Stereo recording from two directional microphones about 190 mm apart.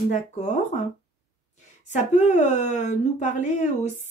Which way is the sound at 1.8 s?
40° left (ahead or behind).